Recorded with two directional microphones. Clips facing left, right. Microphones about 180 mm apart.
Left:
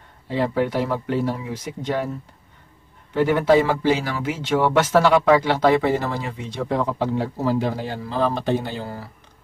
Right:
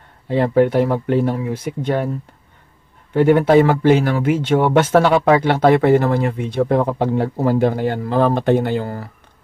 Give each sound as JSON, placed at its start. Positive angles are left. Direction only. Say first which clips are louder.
{"t": 0.3, "sound": "speech", "louder": "right 7 dB", "side_deg": -55}
{"t": 3.1, "sound": "speech", "louder": "right 4 dB", "side_deg": -50}